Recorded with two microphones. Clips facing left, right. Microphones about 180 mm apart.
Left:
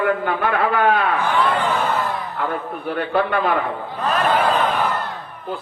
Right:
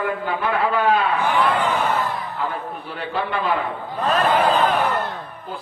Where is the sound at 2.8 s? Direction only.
60° left (ahead or behind).